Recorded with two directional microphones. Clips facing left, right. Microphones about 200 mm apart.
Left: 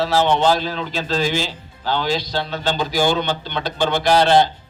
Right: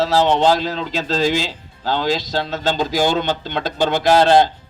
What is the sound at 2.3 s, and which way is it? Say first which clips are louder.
Speech: right 2 dB; 40° right (ahead or behind).